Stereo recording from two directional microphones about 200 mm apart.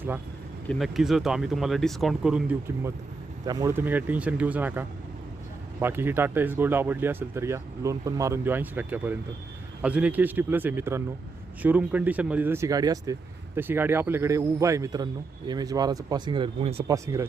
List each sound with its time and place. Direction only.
0.7 s speech: centre (ahead or behind); by 16.8 s 25° right (ahead or behind)
16.8 s speech: 15° right (ahead or behind)